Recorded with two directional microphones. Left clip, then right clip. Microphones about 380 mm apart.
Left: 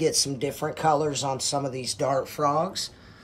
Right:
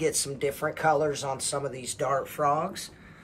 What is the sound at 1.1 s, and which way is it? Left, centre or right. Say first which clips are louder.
Speech: left 4 dB; centre.